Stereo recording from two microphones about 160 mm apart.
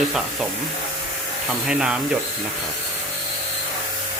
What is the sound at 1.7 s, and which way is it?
Speech, 5° right (ahead or behind).